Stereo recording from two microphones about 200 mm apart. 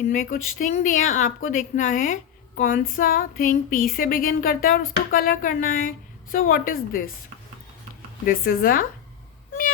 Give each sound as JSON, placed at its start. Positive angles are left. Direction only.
{"t": 0.1, "sound": "speech", "side_deg": 40}
{"t": 8.2, "sound": "speech", "side_deg": 45}